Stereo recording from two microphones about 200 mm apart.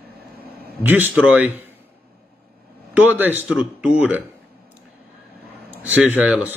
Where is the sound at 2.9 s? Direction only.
10° right (ahead or behind).